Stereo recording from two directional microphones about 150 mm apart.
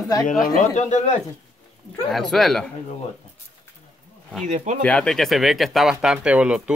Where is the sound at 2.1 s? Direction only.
Centre (ahead or behind).